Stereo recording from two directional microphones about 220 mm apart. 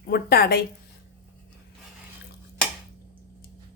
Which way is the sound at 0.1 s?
45° left (ahead or behind).